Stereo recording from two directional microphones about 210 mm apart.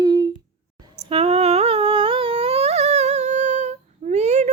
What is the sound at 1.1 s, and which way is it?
Humming, 30° right (ahead or behind).